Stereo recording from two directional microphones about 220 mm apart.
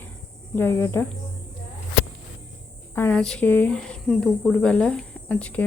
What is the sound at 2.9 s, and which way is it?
Speech, 5° left (ahead or behind).